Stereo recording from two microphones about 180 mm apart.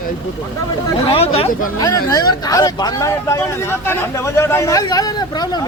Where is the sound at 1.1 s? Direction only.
35° left (ahead or behind).